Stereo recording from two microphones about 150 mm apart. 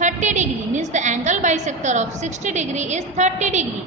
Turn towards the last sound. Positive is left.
turn(degrees=-50)  # may be behind; listen again after turning